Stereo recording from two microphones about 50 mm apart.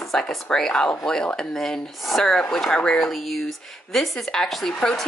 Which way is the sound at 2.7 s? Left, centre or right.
Centre.